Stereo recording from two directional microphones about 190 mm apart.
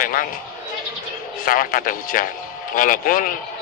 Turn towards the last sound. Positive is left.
turn(degrees=45)  # may be behind; listen again after turning